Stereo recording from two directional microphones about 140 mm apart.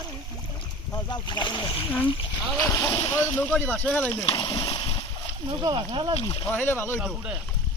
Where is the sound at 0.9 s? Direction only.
30° left (ahead or behind).